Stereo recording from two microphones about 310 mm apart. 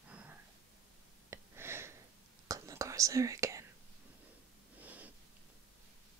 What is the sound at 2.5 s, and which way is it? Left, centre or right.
Whispering, centre.